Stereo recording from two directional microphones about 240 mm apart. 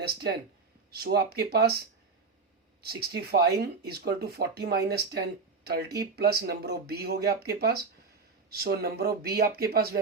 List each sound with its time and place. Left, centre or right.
0.0 s speech: right
2.8 s speech: right